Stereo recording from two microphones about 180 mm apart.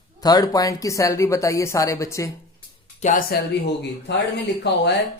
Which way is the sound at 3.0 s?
50° left (ahead or behind).